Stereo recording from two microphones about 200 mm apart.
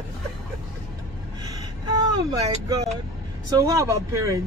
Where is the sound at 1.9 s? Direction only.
15° right (ahead or behind).